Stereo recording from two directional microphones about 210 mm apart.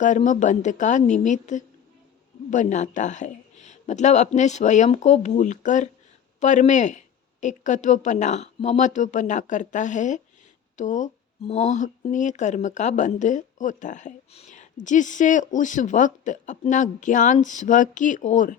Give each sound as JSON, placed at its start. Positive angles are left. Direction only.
{"t": 0.0, "sound": "speech", "side_deg": 35}